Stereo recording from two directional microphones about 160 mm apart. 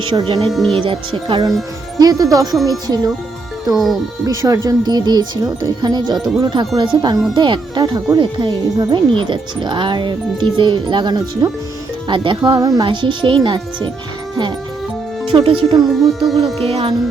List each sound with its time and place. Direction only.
0.1 s speech: 30° right (ahead or behind)
0.5 s music: centre (ahead or behind)
0.8 s speech: 30° right (ahead or behind)
4.3 s speech: 20° right (ahead or behind)
6.1 s music: centre (ahead or behind)
6.4 s speech: 30° right (ahead or behind)
15.3 s speech: 35° right (ahead or behind)
16.2 s music: centre (ahead or behind)
16.6 s speech: 35° right (ahead or behind)